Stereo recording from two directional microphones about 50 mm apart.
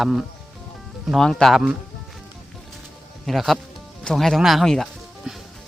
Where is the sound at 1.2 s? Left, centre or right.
Centre.